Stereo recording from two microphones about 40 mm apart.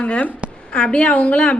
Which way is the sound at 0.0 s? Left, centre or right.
Left.